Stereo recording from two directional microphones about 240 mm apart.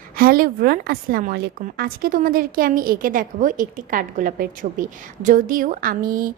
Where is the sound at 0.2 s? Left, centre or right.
Right.